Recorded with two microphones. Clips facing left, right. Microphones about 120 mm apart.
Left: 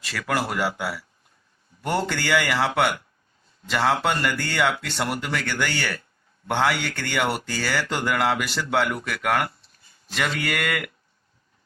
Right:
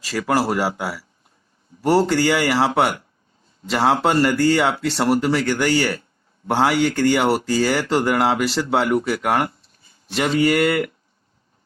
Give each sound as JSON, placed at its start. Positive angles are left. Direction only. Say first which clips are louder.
{"t": 0.0, "sound": "speech", "louder": "right 6 dB", "side_deg": -40}